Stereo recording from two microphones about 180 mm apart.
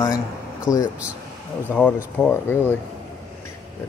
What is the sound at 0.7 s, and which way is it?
Speech, 20° left (ahead or behind).